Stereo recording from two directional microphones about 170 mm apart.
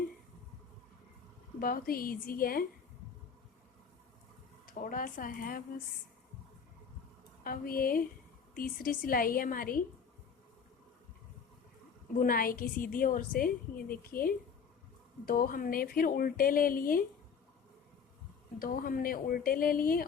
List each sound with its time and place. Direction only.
1.5 s a woman's voice: 60° left (ahead or behind)
4.6 s a woman's voice: 55° left (ahead or behind)
7.4 s a woman's voice: 55° left (ahead or behind)
12.2 s a woman's voice: 60° left (ahead or behind)
18.6 s a woman's voice: 55° left (ahead or behind)